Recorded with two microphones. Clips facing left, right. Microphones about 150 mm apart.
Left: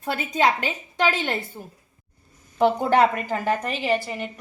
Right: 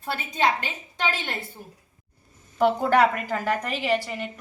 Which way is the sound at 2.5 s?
20° left (ahead or behind).